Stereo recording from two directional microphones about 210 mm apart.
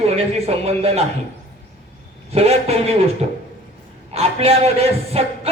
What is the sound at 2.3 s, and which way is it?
Speech, 30° right (ahead or behind).